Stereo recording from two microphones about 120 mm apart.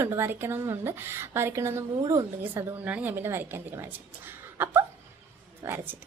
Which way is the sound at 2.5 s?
20° right (ahead or behind).